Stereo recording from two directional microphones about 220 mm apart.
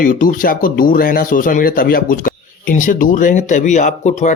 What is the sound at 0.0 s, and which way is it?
Speech, 35° left (ahead or behind).